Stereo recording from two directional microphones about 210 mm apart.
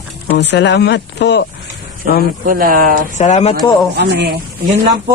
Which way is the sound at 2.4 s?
40° right (ahead or behind).